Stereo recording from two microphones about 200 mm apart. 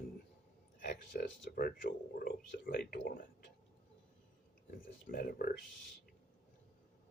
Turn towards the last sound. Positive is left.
turn(degrees=50)  # may be behind; listen again after turning